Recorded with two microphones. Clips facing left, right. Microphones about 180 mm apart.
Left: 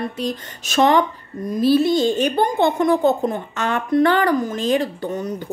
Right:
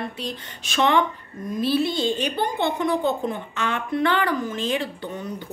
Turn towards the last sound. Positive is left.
turn(degrees=45)  # may be behind; listen again after turning